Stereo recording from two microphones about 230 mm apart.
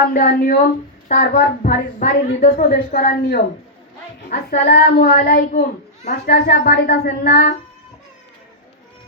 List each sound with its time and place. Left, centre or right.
0.0 s a woman's voice: left
4.2 s child singing: left
6.1 s a woman's voice: left